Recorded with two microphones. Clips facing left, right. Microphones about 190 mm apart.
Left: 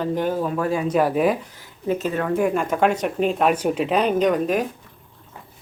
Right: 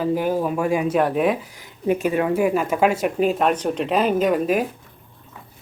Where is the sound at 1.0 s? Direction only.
Centre (ahead or behind).